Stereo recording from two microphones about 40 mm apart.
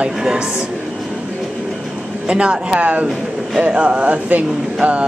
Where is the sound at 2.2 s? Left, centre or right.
Right.